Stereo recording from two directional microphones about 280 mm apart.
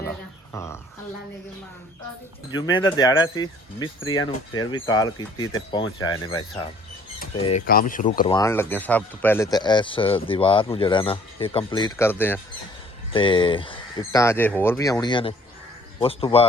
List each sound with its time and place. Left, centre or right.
0.0 s a sound: centre
2.6 s speech: centre
8.3 s speech: centre
13.1 s speech: centre